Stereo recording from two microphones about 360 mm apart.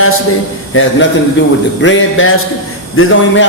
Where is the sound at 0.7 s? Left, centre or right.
Left.